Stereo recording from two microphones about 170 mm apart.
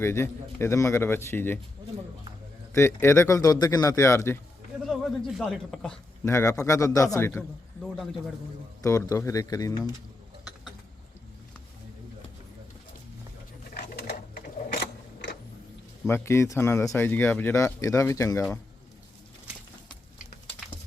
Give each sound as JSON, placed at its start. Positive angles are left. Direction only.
{"t": 0.0, "sound": "speech", "side_deg": 15}
{"t": 2.7, "sound": "speech", "side_deg": 15}
{"t": 4.8, "sound": "a man's voice", "side_deg": 0}
{"t": 6.2, "sound": "a man's voice", "side_deg": 15}
{"t": 7.8, "sound": "speech", "side_deg": 0}
{"t": 8.8, "sound": "a man's voice", "side_deg": 20}
{"t": 16.0, "sound": "speech", "side_deg": 15}